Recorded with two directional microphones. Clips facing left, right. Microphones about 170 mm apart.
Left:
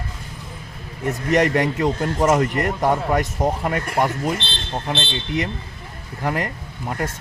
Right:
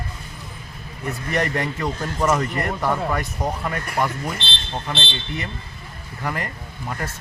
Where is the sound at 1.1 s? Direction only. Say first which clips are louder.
Left 6 dB; 20° left (ahead or behind).